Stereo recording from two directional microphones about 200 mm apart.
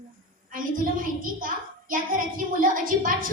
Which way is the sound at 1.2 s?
45° right (ahead or behind).